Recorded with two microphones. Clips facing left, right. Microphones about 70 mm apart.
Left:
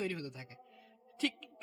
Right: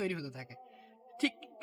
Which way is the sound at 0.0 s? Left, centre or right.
Right.